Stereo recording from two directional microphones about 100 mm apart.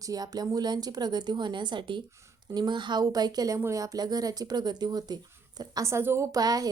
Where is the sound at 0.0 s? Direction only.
40° right (ahead or behind).